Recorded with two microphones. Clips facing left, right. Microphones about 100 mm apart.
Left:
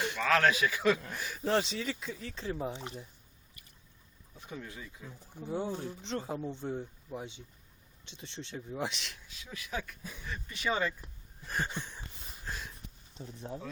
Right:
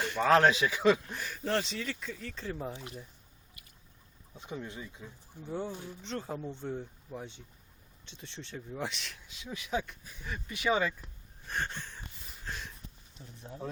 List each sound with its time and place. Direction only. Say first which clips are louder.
0.2 s speech: right 4 dB; 30° right (ahead or behind)
1.2 s speech: left 2 dB; 5° left (ahead or behind)
2.7 s speech: left 2 dB; 25° left (ahead or behind)
4.4 s speech: right 3 dB; 20° right (ahead or behind)
5.5 s speech: left 2 dB; 5° left (ahead or behind)
9.2 s speech: right 4 dB; 20° right (ahead or behind)
11.0 s a sound: left 1 dB; 5° left (ahead or behind)
11.8 s a sound: left 2 dB; 15° left (ahead or behind)
12.5 s sniff: even; centre (ahead or behind)